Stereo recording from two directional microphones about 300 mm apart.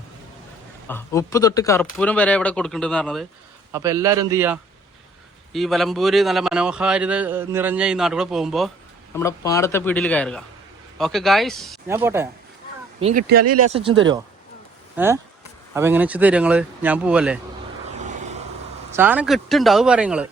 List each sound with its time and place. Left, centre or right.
0.9 s a man's voice: centre
3.7 s a man's voice: centre
9.1 s a man's voice: centre
13.0 s speech: right
13.4 s speech: right
13.7 s speech: centre
14.9 s a man's voice: centre
17.9 s vehicle: right
18.9 s a man's voice: centre